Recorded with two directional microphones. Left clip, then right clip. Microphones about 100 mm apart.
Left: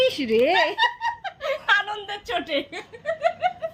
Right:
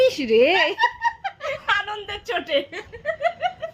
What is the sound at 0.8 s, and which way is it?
Laughter, 30° left (ahead or behind).